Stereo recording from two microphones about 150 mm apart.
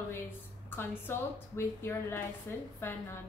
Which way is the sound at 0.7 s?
15° left (ahead or behind).